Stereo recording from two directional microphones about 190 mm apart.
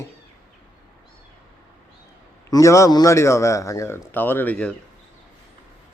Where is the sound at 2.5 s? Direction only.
15° left (ahead or behind).